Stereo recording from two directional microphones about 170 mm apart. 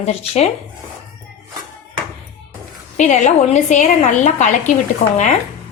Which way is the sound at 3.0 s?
45° left (ahead or behind).